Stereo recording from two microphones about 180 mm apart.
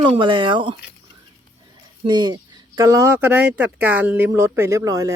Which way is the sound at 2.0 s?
25° right (ahead or behind).